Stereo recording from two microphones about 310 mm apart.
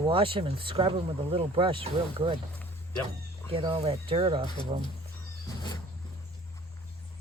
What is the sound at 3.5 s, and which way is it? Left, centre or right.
Speech, centre.